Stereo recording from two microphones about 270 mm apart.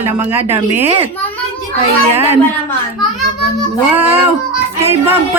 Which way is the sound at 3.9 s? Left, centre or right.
Centre.